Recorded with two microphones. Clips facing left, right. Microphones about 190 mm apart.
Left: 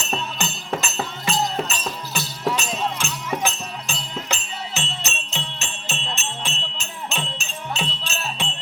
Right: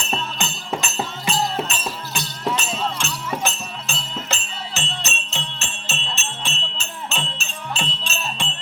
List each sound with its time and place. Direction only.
0.1 s music: 5° left (ahead or behind)
2.7 s music: 10° left (ahead or behind)